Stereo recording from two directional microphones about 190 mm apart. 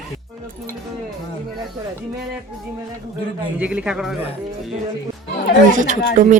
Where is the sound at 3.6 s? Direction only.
5° right (ahead or behind).